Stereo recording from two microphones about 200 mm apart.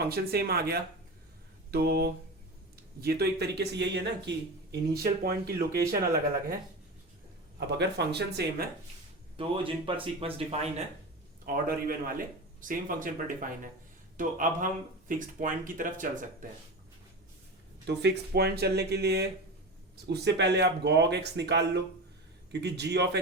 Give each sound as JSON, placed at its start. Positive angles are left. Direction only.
{"t": 0.1, "sound": "speech", "side_deg": -50}
{"t": 7.7, "sound": "speech", "side_deg": -55}
{"t": 9.4, "sound": "speech", "side_deg": -25}
{"t": 11.4, "sound": "speech", "side_deg": -45}
{"t": 17.8, "sound": "speech", "side_deg": -55}